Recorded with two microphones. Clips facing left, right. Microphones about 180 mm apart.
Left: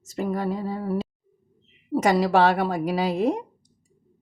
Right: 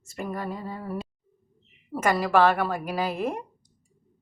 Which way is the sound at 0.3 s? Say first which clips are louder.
Left 6 dB; 30° left (ahead or behind).